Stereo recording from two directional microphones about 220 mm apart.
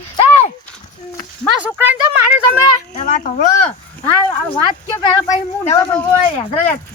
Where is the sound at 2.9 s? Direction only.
35° left (ahead or behind).